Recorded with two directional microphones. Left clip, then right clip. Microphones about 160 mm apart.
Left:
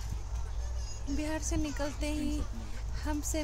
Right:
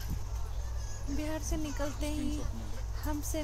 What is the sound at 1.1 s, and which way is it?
Speech, 10° left (ahead or behind).